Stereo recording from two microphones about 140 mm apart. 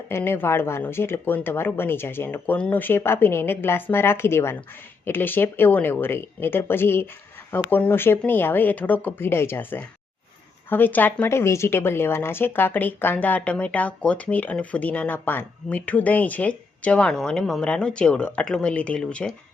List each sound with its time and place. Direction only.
0.1 s speech: 15° left (ahead or behind)